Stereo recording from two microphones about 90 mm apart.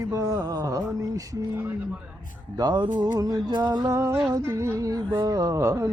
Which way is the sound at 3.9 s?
30° right (ahead or behind).